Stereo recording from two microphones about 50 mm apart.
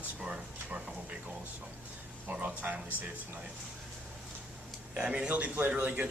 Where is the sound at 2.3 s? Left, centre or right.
Right.